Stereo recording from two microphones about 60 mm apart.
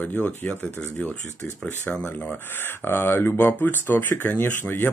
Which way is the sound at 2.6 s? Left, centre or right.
Left.